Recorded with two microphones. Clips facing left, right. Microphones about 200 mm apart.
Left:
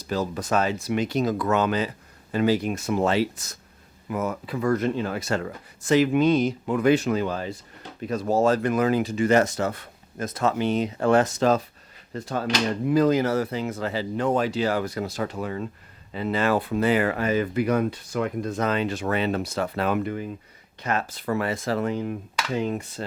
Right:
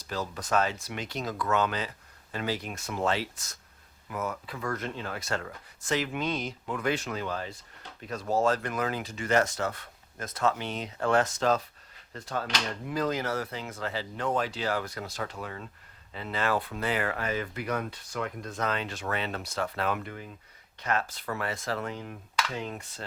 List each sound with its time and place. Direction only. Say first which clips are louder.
0.4 s speech: left 1 dB; 10° left (ahead or behind)
8.2 s speech: left 5 dB; 40° left (ahead or behind)
8.4 s speech: left 7 dB; 10° left (ahead or behind)